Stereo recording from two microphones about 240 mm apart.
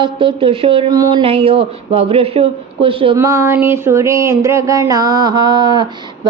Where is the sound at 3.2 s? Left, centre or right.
Centre.